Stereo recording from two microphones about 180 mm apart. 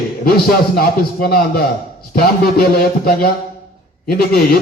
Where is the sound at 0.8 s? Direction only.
55° left (ahead or behind).